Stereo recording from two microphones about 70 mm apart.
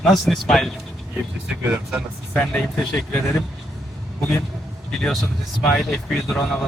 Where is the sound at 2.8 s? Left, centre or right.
Centre.